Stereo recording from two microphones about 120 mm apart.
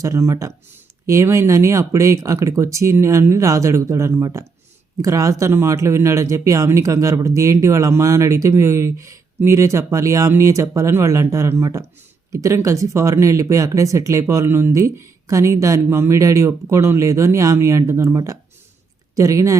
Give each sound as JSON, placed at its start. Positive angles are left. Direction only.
{"t": 0.0, "sound": "speech", "side_deg": -25}